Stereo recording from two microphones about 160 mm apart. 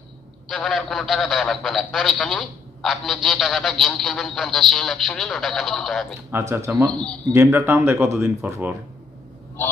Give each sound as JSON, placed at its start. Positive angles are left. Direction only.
{"t": 0.5, "sound": "a man's voice", "side_deg": 0}
{"t": 6.3, "sound": "speech", "side_deg": -15}
{"t": 6.9, "sound": "a man's voice", "side_deg": 5}
{"t": 7.3, "sound": "speech", "side_deg": -15}